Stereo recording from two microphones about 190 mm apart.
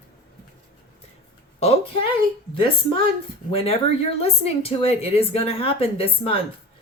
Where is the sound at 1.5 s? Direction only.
30° left (ahead or behind).